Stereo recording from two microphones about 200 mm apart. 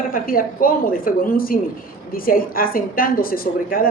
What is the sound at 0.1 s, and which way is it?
A woman's voice, 45° left (ahead or behind).